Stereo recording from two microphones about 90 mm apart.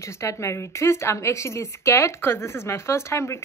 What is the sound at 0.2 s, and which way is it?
Speech, 35° left (ahead or behind).